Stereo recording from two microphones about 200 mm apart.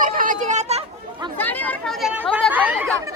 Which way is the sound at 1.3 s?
10° left (ahead or behind).